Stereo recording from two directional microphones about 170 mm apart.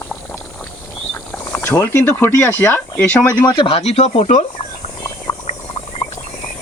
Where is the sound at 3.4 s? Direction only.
30° left (ahead or behind).